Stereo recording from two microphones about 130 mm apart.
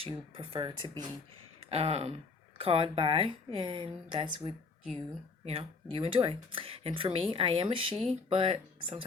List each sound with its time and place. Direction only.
0.0 s a woman's voice: 40° right (ahead or behind)
1.7 s a woman's voice: 50° right (ahead or behind)